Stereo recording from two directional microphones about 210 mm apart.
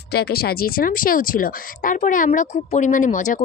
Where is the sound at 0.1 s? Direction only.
50° left (ahead or behind).